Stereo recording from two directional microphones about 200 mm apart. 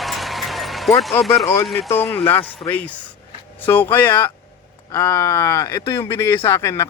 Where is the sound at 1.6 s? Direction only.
Centre (ahead or behind).